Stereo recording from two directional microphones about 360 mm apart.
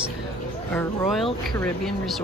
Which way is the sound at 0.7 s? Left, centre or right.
Centre.